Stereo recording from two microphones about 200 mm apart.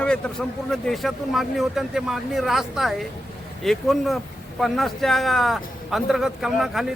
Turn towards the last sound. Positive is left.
turn(degrees=0)  # may be behind; listen again after turning